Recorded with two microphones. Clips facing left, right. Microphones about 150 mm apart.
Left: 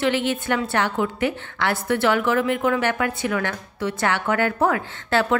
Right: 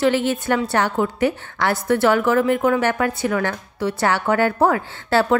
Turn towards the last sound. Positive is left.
turn(degrees=-35)  # may be behind; listen again after turning